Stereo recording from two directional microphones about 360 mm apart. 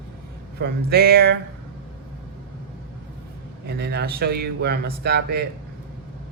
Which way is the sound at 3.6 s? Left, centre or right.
Right.